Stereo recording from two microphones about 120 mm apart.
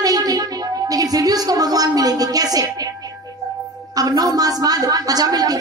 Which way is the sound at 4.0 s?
30° right (ahead or behind).